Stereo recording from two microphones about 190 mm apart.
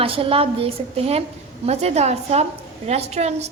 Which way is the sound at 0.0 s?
30° right (ahead or behind).